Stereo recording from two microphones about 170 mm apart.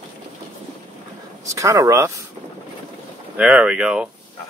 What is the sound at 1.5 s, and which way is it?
Speech, 20° right (ahead or behind).